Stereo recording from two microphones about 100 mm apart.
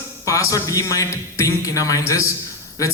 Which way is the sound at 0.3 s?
35° left (ahead or behind).